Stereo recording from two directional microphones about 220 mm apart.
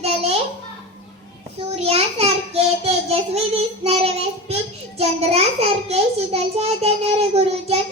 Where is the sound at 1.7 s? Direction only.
25° right (ahead or behind).